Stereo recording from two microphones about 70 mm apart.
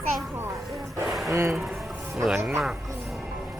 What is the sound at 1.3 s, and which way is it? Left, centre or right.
Speech, right.